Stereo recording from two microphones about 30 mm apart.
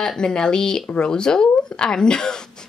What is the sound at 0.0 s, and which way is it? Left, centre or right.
Speech, left.